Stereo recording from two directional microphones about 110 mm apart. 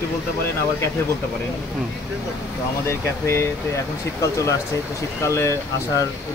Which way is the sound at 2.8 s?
25° left (ahead or behind).